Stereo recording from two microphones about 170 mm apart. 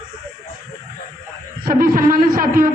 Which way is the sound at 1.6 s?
55° right (ahead or behind).